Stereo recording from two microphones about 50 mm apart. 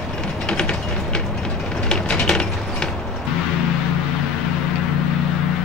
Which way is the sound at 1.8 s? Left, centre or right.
Centre.